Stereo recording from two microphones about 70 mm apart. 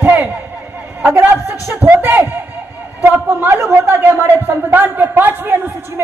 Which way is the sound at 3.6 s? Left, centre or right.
Right.